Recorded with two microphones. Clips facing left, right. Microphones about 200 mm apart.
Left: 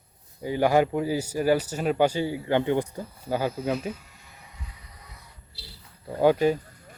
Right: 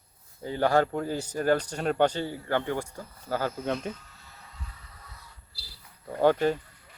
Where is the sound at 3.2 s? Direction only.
15° left (ahead or behind).